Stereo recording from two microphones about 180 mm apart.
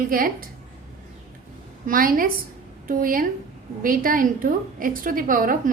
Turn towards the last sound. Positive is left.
turn(degrees=-50)  # may be behind; listen again after turning